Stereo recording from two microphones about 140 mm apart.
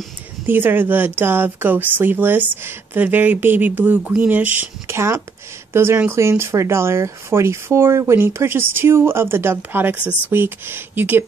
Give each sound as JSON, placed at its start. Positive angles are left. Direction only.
{"t": 0.5, "sound": "speech", "side_deg": -15}